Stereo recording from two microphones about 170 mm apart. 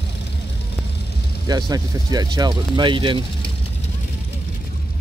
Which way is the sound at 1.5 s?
25° right (ahead or behind).